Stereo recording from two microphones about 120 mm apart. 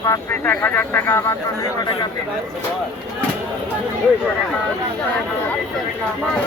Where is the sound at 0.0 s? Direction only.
25° left (ahead or behind).